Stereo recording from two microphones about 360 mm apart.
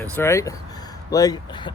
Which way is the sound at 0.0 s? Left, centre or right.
Centre.